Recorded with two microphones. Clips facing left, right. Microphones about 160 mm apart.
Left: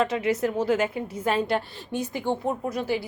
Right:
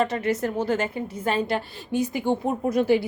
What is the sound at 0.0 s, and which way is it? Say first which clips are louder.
A woman's voice: even; centre (ahead or behind).